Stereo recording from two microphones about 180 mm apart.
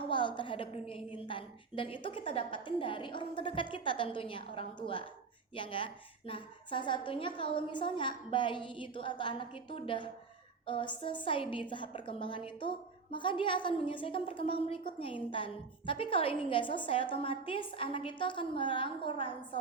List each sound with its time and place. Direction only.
0.1 s a woman's voice: 25° left (ahead or behind)